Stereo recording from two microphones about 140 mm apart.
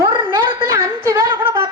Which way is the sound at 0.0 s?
25° right (ahead or behind).